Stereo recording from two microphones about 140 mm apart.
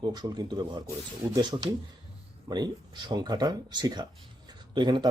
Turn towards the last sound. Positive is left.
turn(degrees=-30)  # may be behind; listen again after turning